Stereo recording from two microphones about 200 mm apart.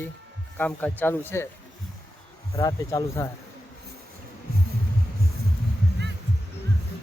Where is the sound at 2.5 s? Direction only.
20° left (ahead or behind).